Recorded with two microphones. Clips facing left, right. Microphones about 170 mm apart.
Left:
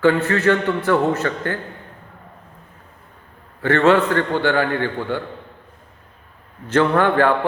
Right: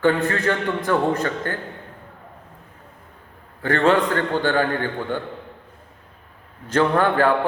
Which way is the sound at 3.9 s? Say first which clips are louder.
Left 2 dB; 15° right (ahead or behind).